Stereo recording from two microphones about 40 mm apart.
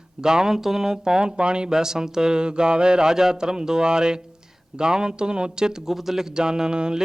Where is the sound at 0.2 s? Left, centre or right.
Centre.